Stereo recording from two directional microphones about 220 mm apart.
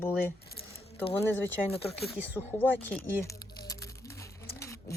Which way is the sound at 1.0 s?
25° left (ahead or behind).